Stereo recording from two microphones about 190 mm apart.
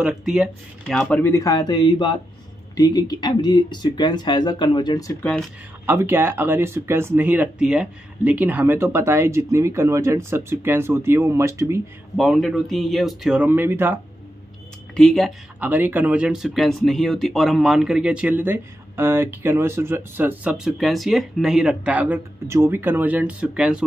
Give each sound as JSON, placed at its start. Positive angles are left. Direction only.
{"t": 0.0, "sound": "speech", "side_deg": -5}
{"t": 5.2, "sound": "speech", "side_deg": 5}
{"t": 5.9, "sound": "speech", "side_deg": -10}
{"t": 12.2, "sound": "speech", "side_deg": 0}
{"t": 15.0, "sound": "speech", "side_deg": 0}